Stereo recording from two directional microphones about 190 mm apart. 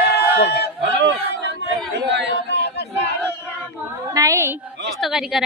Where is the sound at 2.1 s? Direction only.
65° right (ahead or behind).